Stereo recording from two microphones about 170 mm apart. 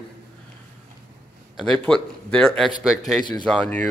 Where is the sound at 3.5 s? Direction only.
10° left (ahead or behind).